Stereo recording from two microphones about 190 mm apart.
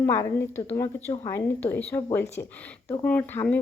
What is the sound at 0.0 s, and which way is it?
Speech, 15° left (ahead or behind).